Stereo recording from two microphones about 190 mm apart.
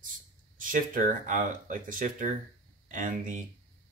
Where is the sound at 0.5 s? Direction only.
45° right (ahead or behind).